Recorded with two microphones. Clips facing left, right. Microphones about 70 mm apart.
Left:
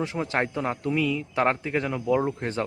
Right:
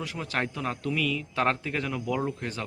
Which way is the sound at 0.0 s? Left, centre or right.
Left.